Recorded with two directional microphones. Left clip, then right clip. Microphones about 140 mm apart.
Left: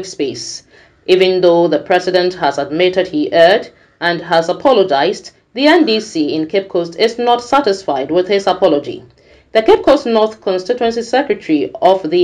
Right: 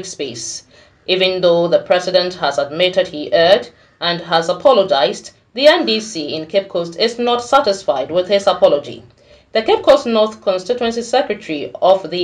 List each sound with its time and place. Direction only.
0.2 s speech: 40° left (ahead or behind)